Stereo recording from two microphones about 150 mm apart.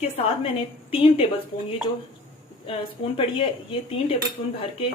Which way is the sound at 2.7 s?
40° left (ahead or behind).